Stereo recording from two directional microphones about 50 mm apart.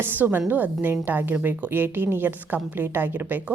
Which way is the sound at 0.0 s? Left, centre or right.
Right.